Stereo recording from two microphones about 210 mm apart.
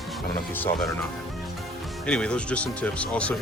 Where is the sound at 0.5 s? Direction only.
10° left (ahead or behind).